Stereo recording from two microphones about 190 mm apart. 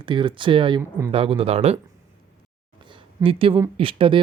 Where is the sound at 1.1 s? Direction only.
30° right (ahead or behind).